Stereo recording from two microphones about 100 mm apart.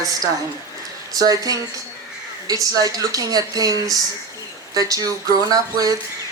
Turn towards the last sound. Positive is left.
turn(degrees=-35)  # may be behind; listen again after turning